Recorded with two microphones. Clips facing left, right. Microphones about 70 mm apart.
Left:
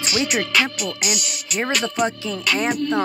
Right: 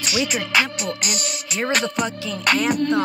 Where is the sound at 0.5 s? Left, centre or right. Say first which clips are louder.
Even; right.